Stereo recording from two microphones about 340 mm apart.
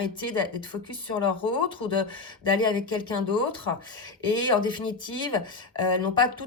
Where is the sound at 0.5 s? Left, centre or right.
Centre.